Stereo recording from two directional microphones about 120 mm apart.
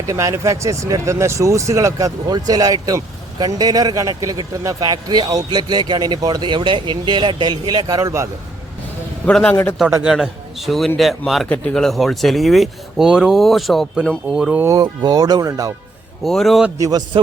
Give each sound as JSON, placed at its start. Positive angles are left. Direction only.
{"t": 0.1, "sound": "speech", "side_deg": -25}
{"t": 9.2, "sound": "a man's voice", "side_deg": 10}
{"t": 10.0, "sound": "speech", "side_deg": -5}
{"t": 11.4, "sound": "speech", "side_deg": 10}
{"t": 14.8, "sound": "speech", "side_deg": -35}
{"t": 16.2, "sound": "speech", "side_deg": 0}
{"t": 16.7, "sound": "a man's voice", "side_deg": -30}